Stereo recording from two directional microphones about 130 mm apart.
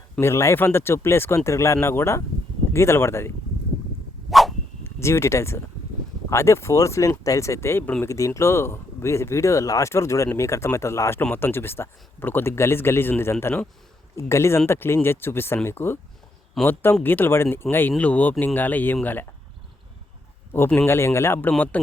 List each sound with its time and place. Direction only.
0.2 s speech: 20° left (ahead or behind)
4.3 s a sound: centre (ahead or behind)
4.8 s speech: 20° left (ahead or behind)
20.7 s speech: 20° left (ahead or behind)